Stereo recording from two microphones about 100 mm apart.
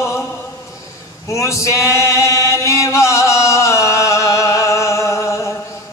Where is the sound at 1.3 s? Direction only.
30° left (ahead or behind).